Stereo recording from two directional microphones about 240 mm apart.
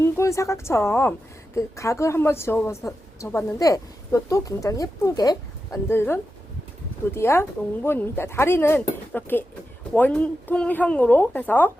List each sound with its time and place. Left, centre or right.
0.0 s a woman's voice: centre